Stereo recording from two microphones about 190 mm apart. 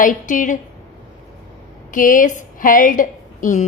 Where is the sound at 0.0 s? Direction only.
45° left (ahead or behind).